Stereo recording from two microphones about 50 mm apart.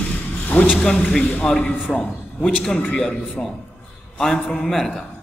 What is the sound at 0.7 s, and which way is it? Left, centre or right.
A man's voice, centre.